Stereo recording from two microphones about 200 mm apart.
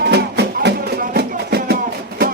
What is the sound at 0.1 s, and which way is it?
Music, 55° right (ahead or behind).